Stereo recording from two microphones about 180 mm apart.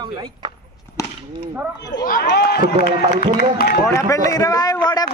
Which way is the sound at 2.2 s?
65° left (ahead or behind).